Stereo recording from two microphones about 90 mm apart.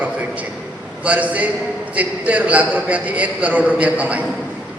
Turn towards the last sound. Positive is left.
turn(degrees=-15)  # may be behind; listen again after turning